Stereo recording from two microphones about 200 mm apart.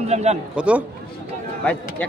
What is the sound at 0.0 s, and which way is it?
Speech, 35° right (ahead or behind).